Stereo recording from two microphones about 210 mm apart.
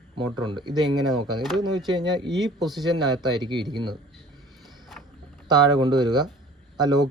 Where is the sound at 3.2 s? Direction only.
20° right (ahead or behind).